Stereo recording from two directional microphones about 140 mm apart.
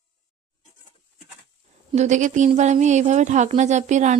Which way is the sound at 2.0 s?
60° right (ahead or behind).